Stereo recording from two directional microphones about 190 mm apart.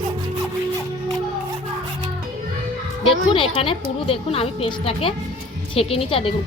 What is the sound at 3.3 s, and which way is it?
A woman's voice, 30° left (ahead or behind).